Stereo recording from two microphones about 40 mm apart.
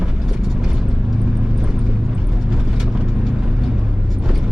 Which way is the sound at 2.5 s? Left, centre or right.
Centre.